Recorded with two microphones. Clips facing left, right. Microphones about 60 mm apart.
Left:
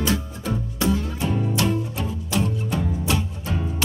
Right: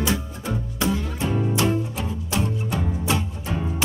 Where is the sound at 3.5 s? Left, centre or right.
Centre.